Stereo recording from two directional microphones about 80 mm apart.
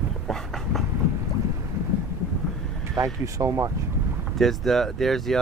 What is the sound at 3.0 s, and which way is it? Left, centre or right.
Speech, right.